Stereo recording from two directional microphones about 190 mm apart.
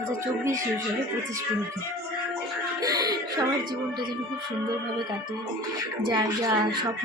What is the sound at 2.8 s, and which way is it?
Music, 20° right (ahead or behind).